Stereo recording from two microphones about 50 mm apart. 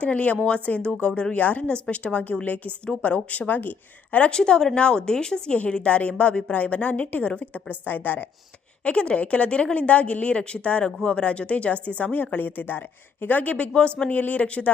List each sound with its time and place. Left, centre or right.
0.0 s a woman's voice: left
4.3 s a woman's voice: centre
5.5 s a woman's voice: left
8.8 s a woman's voice: left